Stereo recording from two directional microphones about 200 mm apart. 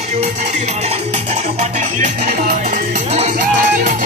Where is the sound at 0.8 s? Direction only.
35° right (ahead or behind).